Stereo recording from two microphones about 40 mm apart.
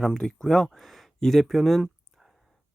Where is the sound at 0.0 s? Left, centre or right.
Centre.